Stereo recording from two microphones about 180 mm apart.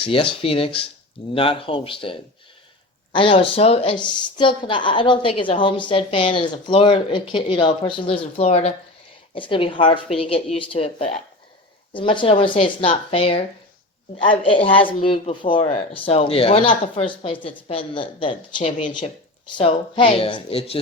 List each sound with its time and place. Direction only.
0.0 s a woman's voice: 30° left (ahead or behind)
11.9 s a woman's voice: 30° left (ahead or behind)